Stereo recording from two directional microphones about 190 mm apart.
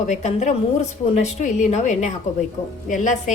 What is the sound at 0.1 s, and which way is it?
A woman's voice, 35° left (ahead or behind).